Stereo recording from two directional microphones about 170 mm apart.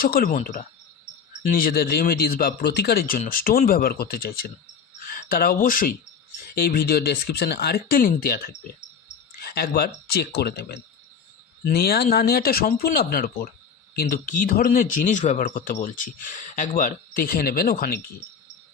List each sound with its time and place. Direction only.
0.0 s speech: 55° left (ahead or behind)